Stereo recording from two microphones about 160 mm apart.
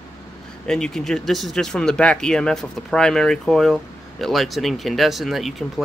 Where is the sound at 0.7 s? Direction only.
5° left (ahead or behind).